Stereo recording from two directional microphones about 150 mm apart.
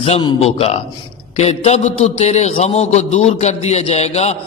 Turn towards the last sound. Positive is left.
turn(degrees=45)  # may be behind; listen again after turning